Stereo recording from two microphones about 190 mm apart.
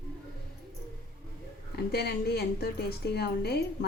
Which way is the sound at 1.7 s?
55° left (ahead or behind).